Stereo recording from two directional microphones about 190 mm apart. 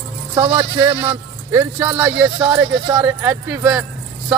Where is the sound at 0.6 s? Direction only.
25° right (ahead or behind).